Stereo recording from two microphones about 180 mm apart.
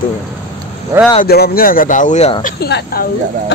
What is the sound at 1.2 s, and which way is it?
Speech, 60° left (ahead or behind).